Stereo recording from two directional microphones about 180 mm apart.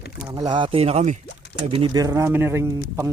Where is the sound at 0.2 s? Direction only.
20° right (ahead or behind); by 1.2 s 40° right (ahead or behind).